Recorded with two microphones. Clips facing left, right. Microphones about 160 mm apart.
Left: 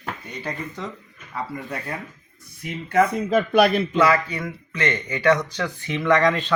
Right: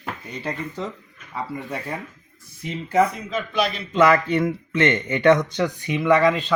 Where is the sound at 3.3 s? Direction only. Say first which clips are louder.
Left 7 dB; 55° left (ahead or behind).